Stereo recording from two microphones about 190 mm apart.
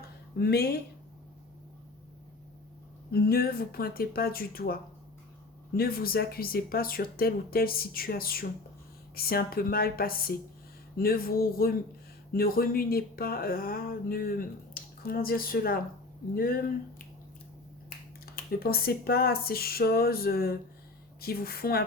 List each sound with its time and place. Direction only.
0.3 s speech: 55° left (ahead or behind)
3.1 s speech: 55° left (ahead or behind)
18.3 s speech: 50° left (ahead or behind)